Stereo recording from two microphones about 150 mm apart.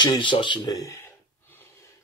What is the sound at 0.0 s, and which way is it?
Speech, 30° left (ahead or behind).